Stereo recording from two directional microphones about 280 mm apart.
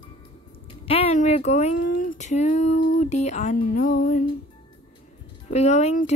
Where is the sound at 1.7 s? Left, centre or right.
Left.